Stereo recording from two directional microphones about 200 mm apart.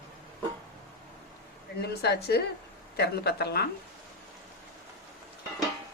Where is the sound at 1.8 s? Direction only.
55° left (ahead or behind).